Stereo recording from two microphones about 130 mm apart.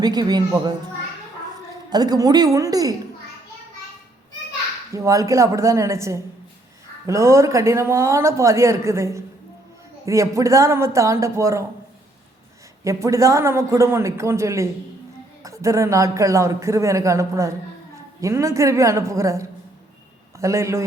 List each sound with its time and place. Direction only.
0.0 s a woman's voice: 30° right (ahead or behind)
1.9 s speech: 30° right (ahead or behind)
4.9 s speech: 25° right (ahead or behind)
12.8 s speech: 25° right (ahead or behind)